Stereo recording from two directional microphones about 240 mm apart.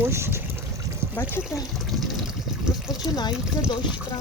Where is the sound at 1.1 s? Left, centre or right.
Centre.